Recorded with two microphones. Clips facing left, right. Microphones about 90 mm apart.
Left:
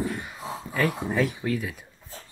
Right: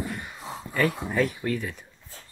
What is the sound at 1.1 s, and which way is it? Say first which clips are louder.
Speech: even; centre (ahead or behind).